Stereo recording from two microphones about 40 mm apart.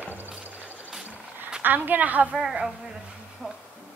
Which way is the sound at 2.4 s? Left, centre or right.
Centre.